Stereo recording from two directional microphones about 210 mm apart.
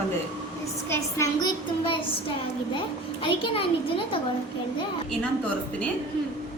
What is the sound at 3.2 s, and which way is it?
Speech, 25° left (ahead or behind).